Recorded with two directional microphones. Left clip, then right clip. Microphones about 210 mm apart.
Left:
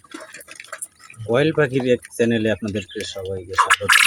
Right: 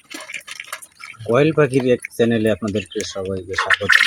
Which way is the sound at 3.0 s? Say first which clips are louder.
Right 3 dB; 15° right (ahead or behind).